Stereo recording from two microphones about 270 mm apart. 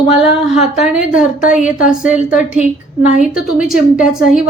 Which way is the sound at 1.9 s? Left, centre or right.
Centre.